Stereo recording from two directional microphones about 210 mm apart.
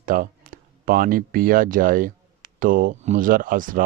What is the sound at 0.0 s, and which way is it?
Speech, 40° right (ahead or behind).